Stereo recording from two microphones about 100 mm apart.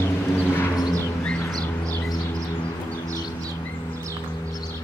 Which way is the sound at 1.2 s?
10° left (ahead or behind).